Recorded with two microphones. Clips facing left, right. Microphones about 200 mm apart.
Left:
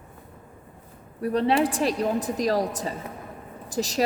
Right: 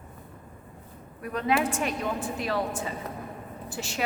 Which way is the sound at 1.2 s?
30° left (ahead or behind).